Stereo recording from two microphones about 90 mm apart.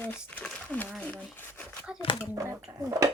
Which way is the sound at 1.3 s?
25° left (ahead or behind).